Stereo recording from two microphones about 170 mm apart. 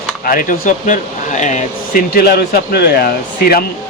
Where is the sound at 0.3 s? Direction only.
55° left (ahead or behind).